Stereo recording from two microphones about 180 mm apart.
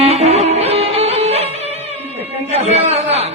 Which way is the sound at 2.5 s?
35° right (ahead or behind).